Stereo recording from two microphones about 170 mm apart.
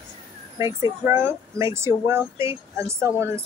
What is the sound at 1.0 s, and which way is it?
Speech, 15° right (ahead or behind).